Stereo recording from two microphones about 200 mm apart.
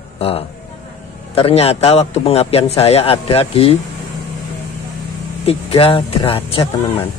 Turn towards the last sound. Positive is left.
turn(degrees=30)  # may be behind; listen again after turning